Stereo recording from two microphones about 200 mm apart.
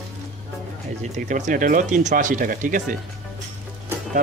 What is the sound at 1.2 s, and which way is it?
Speech, 40° right (ahead or behind).